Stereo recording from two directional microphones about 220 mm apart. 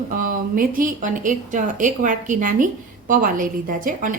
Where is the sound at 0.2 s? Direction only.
40° right (ahead or behind).